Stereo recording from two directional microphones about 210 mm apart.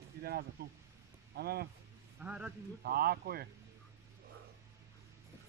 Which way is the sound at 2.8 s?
45° right (ahead or behind).